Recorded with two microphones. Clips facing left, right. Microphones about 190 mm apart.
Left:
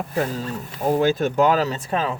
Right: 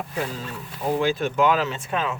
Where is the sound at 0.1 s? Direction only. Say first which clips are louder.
Left 8 dB; 40° left (ahead or behind).